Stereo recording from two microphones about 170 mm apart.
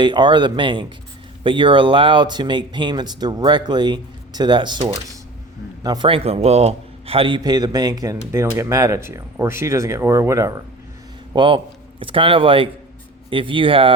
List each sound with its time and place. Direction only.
0.0 s speech: 25° right (ahead or behind)
11.3 s speech: 30° right (ahead or behind)